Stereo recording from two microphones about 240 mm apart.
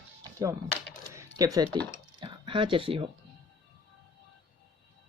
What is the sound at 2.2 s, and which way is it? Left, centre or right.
Speech, right.